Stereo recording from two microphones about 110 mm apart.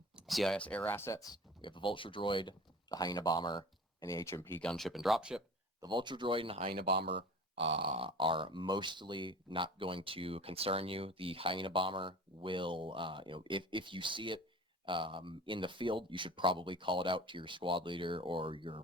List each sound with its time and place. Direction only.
0.2 s speech: centre (ahead or behind); by 1.4 s 30° left (ahead or behind)
1.6 s speech: 50° left (ahead or behind)
4.0 s speech: 25° left (ahead or behind)
4.6 s speech: 5° left (ahead or behind)
5.8 s speech: 45° right (ahead or behind)